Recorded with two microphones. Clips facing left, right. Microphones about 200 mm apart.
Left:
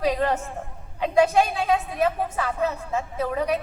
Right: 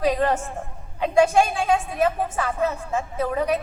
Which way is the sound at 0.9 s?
50° right (ahead or behind).